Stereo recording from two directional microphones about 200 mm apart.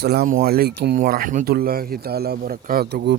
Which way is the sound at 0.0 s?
50° right (ahead or behind).